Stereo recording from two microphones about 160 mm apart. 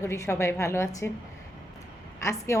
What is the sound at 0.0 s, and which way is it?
A woman's voice, 15° left (ahead or behind).